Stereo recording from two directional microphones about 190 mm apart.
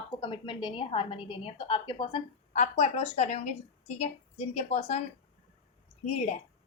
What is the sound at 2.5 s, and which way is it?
A woman's voice, 35° left (ahead or behind).